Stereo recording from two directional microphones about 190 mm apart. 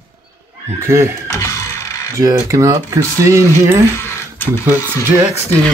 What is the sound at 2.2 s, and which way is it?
Speech, 15° right (ahead or behind).